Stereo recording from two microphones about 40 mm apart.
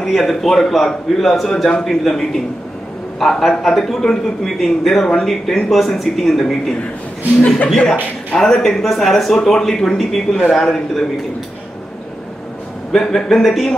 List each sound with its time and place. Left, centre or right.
0.0 s a man's voice: centre
7.4 s speech: left
8.4 s a man's voice: centre
9.4 s a man's voice: centre
12.9 s speech: centre